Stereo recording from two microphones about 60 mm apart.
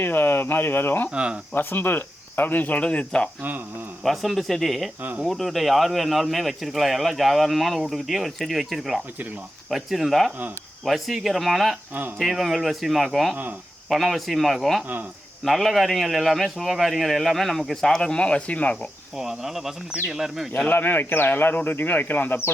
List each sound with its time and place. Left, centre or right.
0.0 s speech: left
1.1 s speech: centre
1.5 s speech: left; by 3.2 s centre
4.0 s speech: centre; by 18.9 s left
19.1 s speech: centre
20.7 s speech: left